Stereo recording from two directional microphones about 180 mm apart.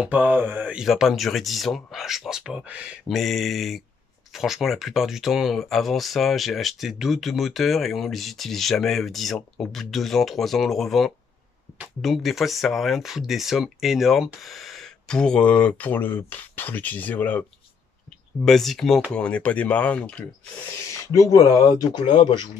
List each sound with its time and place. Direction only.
0.0 s speech: 10° right (ahead or behind); by 20.2 s 5° left (ahead or behind)
21.1 s speech: 20° left (ahead or behind)